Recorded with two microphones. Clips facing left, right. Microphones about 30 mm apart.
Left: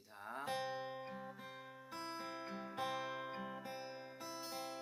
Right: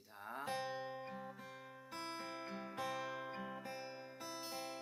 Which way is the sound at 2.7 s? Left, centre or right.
Left.